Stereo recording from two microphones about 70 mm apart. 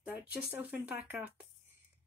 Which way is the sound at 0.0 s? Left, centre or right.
Right.